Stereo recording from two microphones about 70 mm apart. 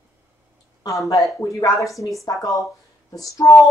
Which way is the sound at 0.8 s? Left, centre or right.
Left.